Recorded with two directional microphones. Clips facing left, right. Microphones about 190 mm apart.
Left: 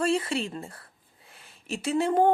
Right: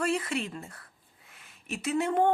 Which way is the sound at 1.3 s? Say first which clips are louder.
Left 3 dB; 30° left (ahead or behind).